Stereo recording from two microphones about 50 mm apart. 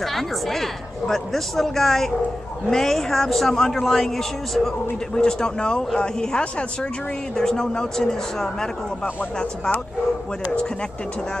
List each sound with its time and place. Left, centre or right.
0.0 s a woman's voice: centre